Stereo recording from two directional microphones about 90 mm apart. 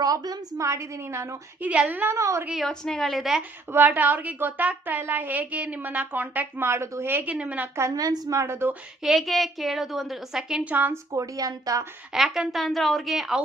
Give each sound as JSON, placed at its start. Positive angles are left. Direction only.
{"t": 0.0, "sound": "a woman's voice", "side_deg": -45}
{"t": 1.6, "sound": "speech", "side_deg": -15}
{"t": 2.1, "sound": "a woman's voice", "side_deg": -35}
{"t": 2.6, "sound": "a woman's voice", "side_deg": 5}
{"t": 3.7, "sound": "speech", "side_deg": -20}
{"t": 7.8, "sound": "a woman's voice", "side_deg": -35}
{"t": 8.4, "sound": "speech", "side_deg": -30}
{"t": 9.0, "sound": "a woman's voice", "side_deg": 0}
{"t": 10.9, "sound": "a woman's voice", "side_deg": -40}
{"t": 12.1, "sound": "a woman's voice", "side_deg": -5}